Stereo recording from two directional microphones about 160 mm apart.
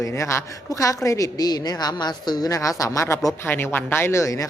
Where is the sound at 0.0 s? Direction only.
20° left (ahead or behind).